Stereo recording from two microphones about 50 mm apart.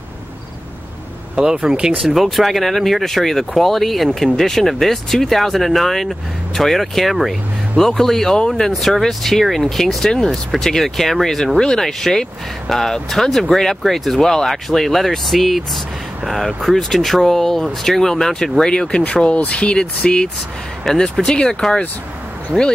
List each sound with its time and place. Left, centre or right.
1.3 s speech: centre
2.0 s speech: centre